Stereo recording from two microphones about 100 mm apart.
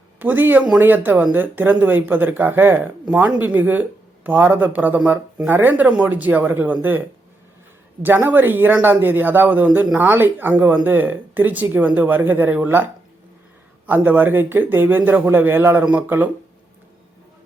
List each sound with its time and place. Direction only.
0.2 s speech: 20° right (ahead or behind)
8.0 s speech: 20° right (ahead or behind)